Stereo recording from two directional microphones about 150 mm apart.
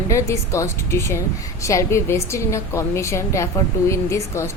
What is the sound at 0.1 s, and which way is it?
Speech, 20° left (ahead or behind).